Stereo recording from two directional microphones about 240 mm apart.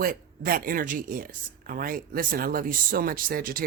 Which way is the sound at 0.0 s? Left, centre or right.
Right.